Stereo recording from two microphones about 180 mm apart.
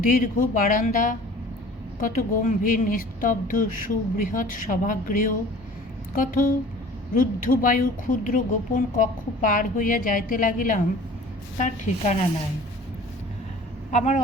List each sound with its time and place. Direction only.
0.0 s a woman's voice: 50° left (ahead or behind)
13.9 s a woman's voice: 40° left (ahead or behind)